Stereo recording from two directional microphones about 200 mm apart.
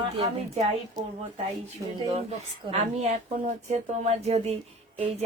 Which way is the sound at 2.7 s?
35° right (ahead or behind).